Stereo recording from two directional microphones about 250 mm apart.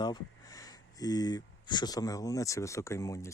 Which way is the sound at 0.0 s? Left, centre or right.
Centre.